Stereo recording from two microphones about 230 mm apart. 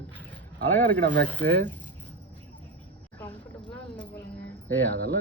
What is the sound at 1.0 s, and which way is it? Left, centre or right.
Speech, right.